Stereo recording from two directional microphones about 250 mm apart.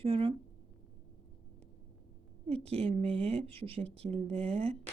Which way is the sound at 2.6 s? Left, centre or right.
Right.